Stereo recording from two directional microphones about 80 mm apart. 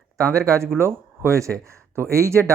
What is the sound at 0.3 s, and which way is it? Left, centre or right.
Speech, right.